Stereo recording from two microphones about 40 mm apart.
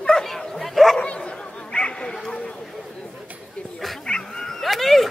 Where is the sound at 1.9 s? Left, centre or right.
Centre.